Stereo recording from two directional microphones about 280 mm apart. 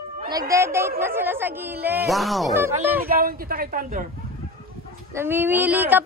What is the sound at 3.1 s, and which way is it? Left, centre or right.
Speech, right.